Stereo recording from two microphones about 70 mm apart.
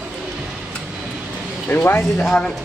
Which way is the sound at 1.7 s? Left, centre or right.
Left.